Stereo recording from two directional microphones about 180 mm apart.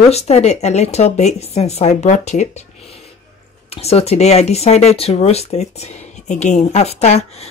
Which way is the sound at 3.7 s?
35° left (ahead or behind).